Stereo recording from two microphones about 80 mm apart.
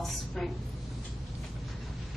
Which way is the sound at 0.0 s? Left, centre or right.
Centre.